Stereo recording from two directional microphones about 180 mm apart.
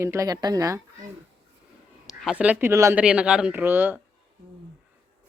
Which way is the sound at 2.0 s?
5° right (ahead or behind).